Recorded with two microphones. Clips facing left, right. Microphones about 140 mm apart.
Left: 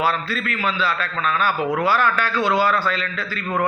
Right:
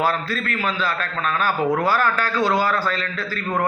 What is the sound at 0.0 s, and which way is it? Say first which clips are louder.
A man's voice: even; 40° right (ahead or behind).